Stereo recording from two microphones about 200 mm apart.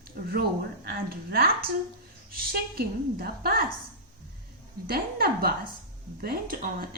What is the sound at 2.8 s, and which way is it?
Speech, 50° right (ahead or behind).